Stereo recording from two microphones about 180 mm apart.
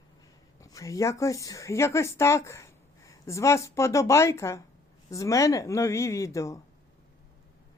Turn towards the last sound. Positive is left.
turn(degrees=15)  # may be behind; listen again after turning